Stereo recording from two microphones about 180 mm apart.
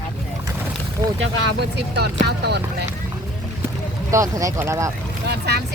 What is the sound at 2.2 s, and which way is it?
Speech, 65° right (ahead or behind).